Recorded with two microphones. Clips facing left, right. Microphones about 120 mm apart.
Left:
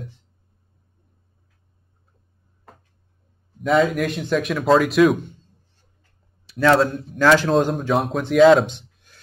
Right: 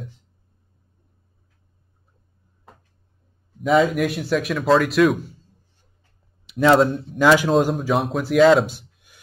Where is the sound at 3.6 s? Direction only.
Centre (ahead or behind).